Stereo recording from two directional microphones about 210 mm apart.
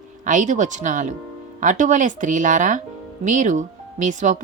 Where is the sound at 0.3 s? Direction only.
35° right (ahead or behind).